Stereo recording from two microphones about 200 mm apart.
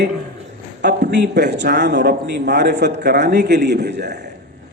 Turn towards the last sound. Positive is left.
turn(degrees=-55)  # may be behind; listen again after turning